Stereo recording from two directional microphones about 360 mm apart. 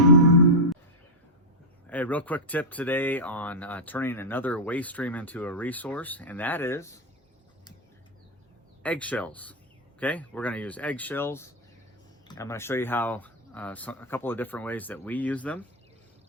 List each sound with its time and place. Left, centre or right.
1.9 s speech: centre
8.8 s speech: centre